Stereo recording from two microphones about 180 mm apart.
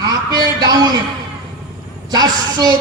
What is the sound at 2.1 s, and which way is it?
Speech, 20° right (ahead or behind).